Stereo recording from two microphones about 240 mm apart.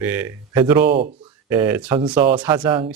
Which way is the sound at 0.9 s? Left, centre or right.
Right.